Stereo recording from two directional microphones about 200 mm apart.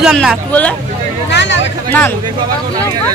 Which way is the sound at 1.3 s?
60° left (ahead or behind).